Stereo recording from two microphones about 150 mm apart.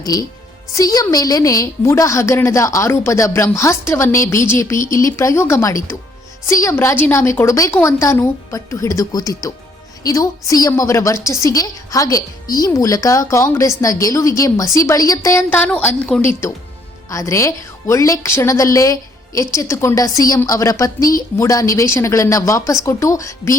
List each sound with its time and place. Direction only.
0.0 s a woman's voice: 25° left (ahead or behind)
15.4 s a woman's voice: 10° left (ahead or behind)
17.1 s a woman's voice: 20° left (ahead or behind)